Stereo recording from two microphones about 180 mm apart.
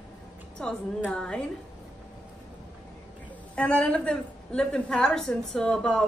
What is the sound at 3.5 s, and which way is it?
A woman's voice, 5° left (ahead or behind).